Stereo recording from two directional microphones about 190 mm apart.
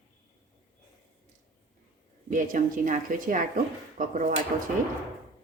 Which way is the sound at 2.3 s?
45° right (ahead or behind).